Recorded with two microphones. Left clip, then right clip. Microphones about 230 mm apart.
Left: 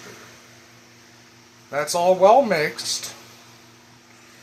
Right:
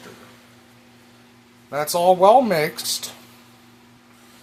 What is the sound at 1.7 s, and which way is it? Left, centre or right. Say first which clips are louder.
Speech: right 2 dB; right.